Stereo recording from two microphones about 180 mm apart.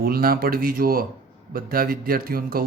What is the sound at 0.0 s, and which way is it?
Speech, 55° right (ahead or behind).